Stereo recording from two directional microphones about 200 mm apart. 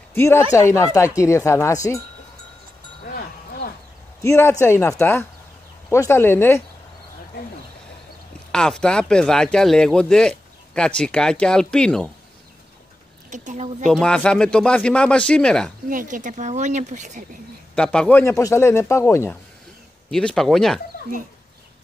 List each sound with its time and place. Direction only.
0.1 s speech: 10° left (ahead or behind)
4.2 s speech: 15° left (ahead or behind)
8.5 s speech: 5° left (ahead or behind)
13.3 s speech: 35° right (ahead or behind)
13.8 s speech: 5° left (ahead or behind)
15.9 s speech: 40° right (ahead or behind)
17.7 s speech: 5° left (ahead or behind)
20.1 s speech: 5° left (ahead or behind)